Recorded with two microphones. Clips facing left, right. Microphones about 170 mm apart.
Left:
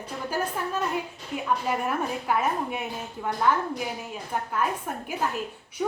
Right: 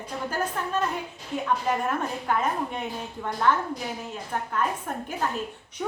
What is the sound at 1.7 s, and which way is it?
A woman's voice, 10° left (ahead or behind).